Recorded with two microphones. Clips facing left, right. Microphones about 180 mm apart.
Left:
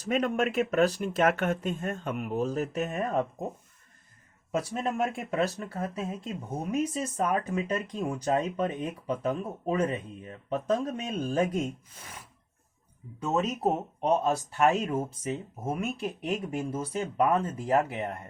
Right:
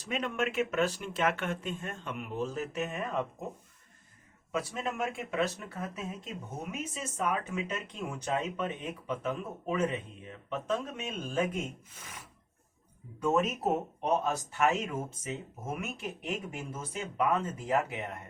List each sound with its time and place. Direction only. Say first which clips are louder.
0.0 s speech: left 6 dB; 45° left (ahead or behind)
4.5 s speech: left 5 dB; 40° left (ahead or behind)
13.1 s speech: even; 25° left (ahead or behind)